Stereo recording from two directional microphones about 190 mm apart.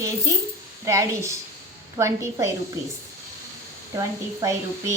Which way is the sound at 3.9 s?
15° right (ahead or behind).